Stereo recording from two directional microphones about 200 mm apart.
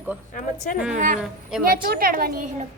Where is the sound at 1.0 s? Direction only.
40° right (ahead or behind).